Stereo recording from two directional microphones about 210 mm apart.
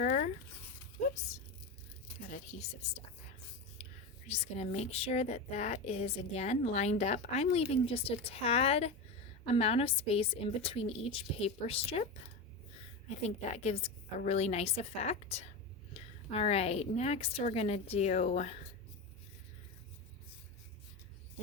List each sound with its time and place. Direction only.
0.0 s a sound: 35° left (ahead or behind)
2.3 s speech: 35° left (ahead or behind)
3.8 s whispering: 30° left (ahead or behind)
4.3 s a woman's voice: 30° left (ahead or behind)
13.1 s a woman's voice: 30° left (ahead or behind)